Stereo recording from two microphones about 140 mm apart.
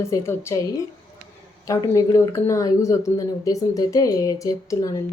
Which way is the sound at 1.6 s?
25° left (ahead or behind).